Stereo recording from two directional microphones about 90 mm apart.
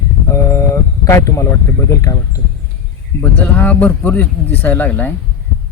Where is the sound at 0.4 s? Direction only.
35° left (ahead or behind).